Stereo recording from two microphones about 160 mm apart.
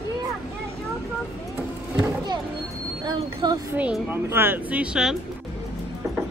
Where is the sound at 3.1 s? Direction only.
30° right (ahead or behind).